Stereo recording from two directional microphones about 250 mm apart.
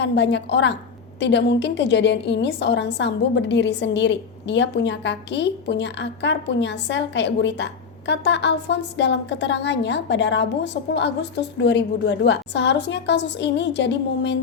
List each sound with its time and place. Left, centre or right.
0.0 s a woman's voice: left